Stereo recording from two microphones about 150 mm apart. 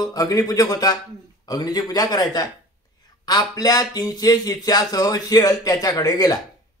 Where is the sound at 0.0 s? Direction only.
25° left (ahead or behind).